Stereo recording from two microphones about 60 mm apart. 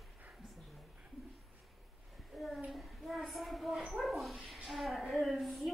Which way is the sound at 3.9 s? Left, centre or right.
Centre.